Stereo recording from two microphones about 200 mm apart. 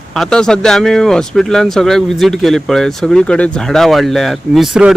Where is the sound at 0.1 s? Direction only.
Centre (ahead or behind).